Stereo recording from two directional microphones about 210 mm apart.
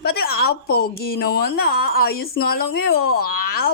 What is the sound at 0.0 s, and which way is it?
A woman's voice, 50° left (ahead or behind).